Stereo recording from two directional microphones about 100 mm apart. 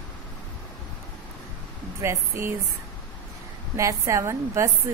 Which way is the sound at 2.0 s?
30° right (ahead or behind).